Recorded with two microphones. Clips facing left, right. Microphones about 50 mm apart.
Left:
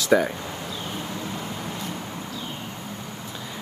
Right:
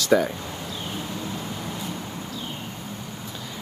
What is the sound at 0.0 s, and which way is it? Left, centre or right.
Speech, left.